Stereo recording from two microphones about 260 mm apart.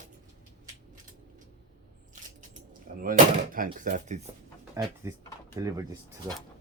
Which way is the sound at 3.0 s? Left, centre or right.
Right.